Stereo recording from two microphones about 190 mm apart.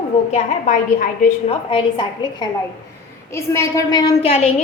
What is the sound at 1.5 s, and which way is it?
A woman's voice, 25° left (ahead or behind).